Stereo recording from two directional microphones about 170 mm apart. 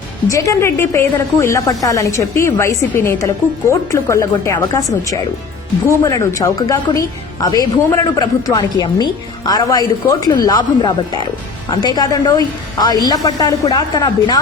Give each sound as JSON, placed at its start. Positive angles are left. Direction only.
{"t": 0.3, "sound": "a woman's voice", "side_deg": 20}